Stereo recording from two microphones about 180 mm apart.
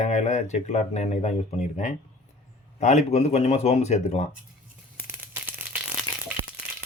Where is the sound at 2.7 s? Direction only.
40° left (ahead or behind).